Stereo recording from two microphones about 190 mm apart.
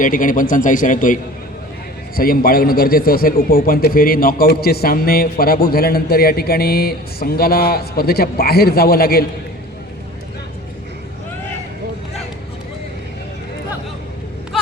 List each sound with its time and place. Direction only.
0.0 s a man's voice: 45° left (ahead or behind)